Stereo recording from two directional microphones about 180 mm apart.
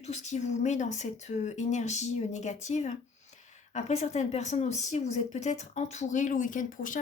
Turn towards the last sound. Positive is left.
turn(degrees=45)  # may be behind; listen again after turning